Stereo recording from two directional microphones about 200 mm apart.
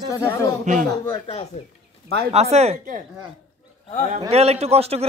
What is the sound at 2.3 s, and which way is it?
Speech, 30° right (ahead or behind).